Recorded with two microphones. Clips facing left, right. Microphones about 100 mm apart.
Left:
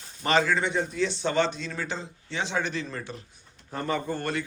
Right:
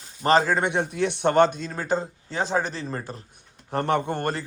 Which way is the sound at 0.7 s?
60° right (ahead or behind).